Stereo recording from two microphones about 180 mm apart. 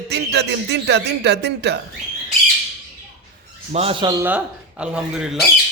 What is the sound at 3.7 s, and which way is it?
Speech, 35° right (ahead or behind).